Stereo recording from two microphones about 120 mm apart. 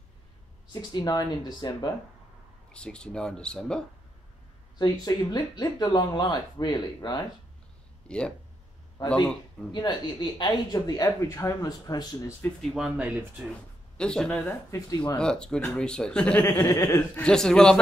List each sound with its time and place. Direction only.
0.9 s speech: 35° left (ahead or behind)
2.7 s speech: 10° left (ahead or behind)
4.7 s speech: 35° left (ahead or behind)
8.1 s speech: 10° left (ahead or behind)
9.0 s speech: 35° left (ahead or behind)
12.6 s speech: 5° right (ahead or behind)
13.9 s speech: 5° left (ahead or behind)
16.5 s speech: 25° left (ahead or behind)
17.2 s speech: 5° left (ahead or behind)